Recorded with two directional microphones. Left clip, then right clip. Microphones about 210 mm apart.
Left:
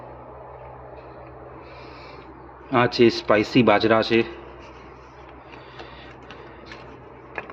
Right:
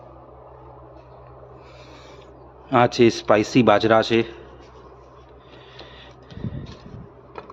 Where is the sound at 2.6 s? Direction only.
15° right (ahead or behind).